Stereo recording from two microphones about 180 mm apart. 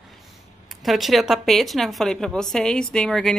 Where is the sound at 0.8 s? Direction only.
Centre (ahead or behind).